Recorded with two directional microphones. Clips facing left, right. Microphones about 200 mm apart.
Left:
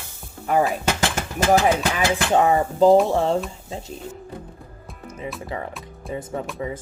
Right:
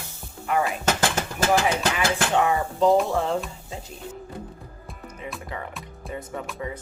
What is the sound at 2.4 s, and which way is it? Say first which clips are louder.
Speech: left 6 dB; 35° left (ahead or behind).